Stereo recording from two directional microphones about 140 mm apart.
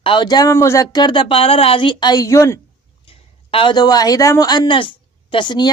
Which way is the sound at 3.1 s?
40° left (ahead or behind).